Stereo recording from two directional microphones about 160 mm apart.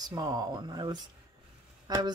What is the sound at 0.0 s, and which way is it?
Speech, 25° right (ahead or behind).